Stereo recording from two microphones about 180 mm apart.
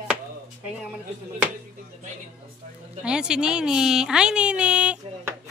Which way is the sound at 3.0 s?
5° right (ahead or behind).